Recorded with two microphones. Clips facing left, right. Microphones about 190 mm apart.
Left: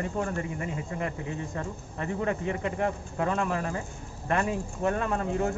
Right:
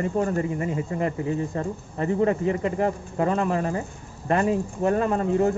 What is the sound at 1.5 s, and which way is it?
Speech, 35° right (ahead or behind).